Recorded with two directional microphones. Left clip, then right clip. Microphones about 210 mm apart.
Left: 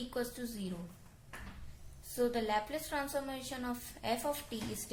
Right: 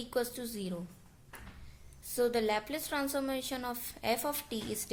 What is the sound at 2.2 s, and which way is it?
A woman's voice, 50° right (ahead or behind).